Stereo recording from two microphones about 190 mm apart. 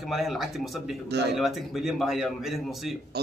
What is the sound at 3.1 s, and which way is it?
Speech, 60° right (ahead or behind).